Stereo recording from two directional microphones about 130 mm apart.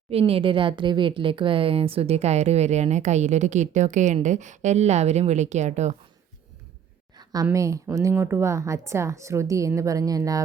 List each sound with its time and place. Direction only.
0.1 s a woman's voice: 50° right (ahead or behind)
7.5 s a woman's voice: 25° right (ahead or behind)